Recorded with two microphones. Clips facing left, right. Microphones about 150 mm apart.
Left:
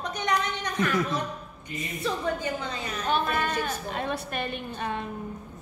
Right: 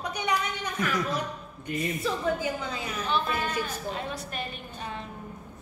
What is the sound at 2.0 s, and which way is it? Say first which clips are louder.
Speech: left 2 dB; 5° right (ahead or behind).